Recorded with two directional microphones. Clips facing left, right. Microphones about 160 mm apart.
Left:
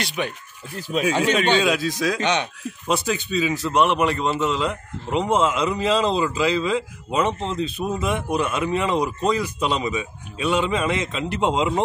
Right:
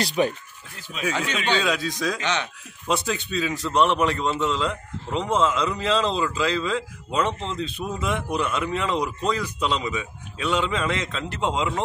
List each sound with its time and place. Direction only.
0.0 s speech: 35° right (ahead or behind)
0.7 s speech: 40° left (ahead or behind)
1.0 s a man's voice: 25° left (ahead or behind)
1.5 s a man's voice: 15° left (ahead or behind)
2.2 s a man's voice: 20° left (ahead or behind)
2.9 s a man's voice: centre (ahead or behind); by 11.8 s 20° left (ahead or behind)